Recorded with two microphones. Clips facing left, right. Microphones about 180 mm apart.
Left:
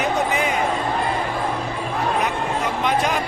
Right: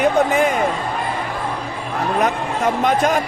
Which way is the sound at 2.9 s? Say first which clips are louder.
Right 3 dB; 45° right (ahead or behind).